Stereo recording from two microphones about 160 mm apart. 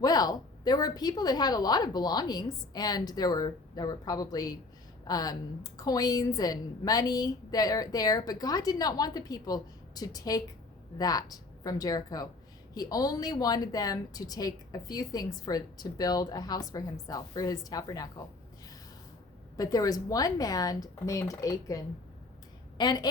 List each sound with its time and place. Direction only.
0.0 s a woman's voice: 25° left (ahead or behind)
19.5 s a woman's voice: 25° left (ahead or behind)
22.8 s a woman's voice: 25° left (ahead or behind)